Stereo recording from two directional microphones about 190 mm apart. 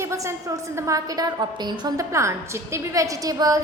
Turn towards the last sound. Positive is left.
turn(degrees=-20)  # may be behind; listen again after turning